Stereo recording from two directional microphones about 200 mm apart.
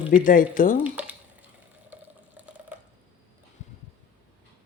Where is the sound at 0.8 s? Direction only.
5° right (ahead or behind).